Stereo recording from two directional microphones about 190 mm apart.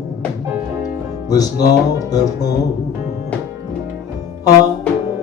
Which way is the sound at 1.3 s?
20° left (ahead or behind).